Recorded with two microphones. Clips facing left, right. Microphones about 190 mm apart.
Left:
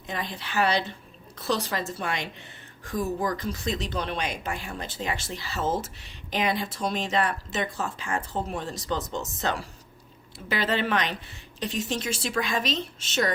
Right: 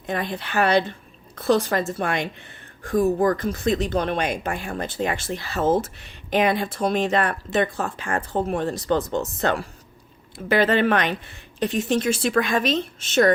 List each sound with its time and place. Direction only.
0.0 s a woman's voice: 55° right (ahead or behind)